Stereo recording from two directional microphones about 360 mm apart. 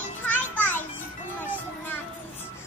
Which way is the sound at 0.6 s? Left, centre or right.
Centre.